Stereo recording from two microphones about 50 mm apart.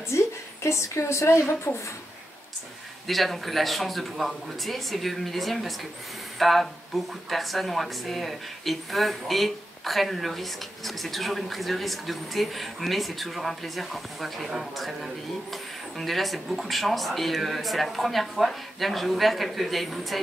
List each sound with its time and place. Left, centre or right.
0.1 s speech: left
3.1 s a woman's voice: centre